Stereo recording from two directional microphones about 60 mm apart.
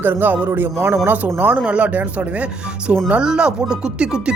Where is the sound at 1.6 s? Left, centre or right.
Right.